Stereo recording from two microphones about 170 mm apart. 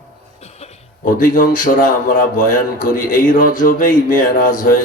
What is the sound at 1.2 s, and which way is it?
Speech, 55° left (ahead or behind).